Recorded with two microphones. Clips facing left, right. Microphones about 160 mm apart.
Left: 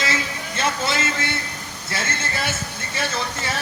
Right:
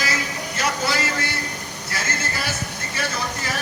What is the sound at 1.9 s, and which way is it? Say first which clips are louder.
Vehicle: left 1 dB; 25° left (ahead or behind).